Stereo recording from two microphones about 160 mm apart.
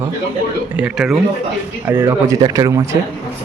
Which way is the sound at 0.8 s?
Centre (ahead or behind).